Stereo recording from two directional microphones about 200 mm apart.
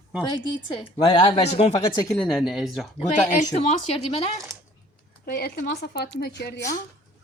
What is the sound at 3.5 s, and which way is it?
Speech, 35° left (ahead or behind).